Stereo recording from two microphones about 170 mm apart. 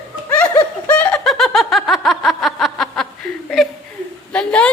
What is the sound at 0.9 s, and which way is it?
Snicker, 5° left (ahead or behind).